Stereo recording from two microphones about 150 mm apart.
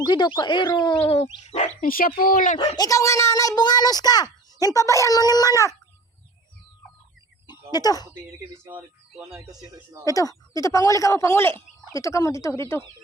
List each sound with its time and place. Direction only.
0.0 s speech: 30° left (ahead or behind); by 1.7 s 50° left (ahead or behind)
1.8 s speech: 70° left (ahead or behind)
2.7 s a child's voice: 25° left (ahead or behind)
7.4 s a sound: 30° left (ahead or behind)
9.3 s speech: 25° right (ahead or behind)
10.1 s a child's voice: 20° left (ahead or behind)